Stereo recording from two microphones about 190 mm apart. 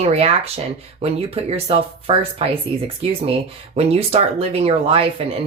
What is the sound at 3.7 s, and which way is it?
Speech, 30° right (ahead or behind).